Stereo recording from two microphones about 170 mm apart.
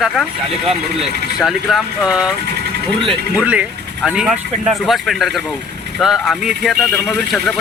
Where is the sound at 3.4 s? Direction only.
10° right (ahead or behind).